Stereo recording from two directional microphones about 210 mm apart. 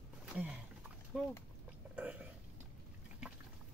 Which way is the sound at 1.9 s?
5° right (ahead or behind).